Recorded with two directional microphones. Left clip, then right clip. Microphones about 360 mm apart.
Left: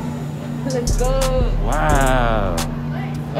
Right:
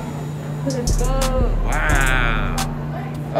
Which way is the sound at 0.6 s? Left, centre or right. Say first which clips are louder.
Left 3 dB; centre.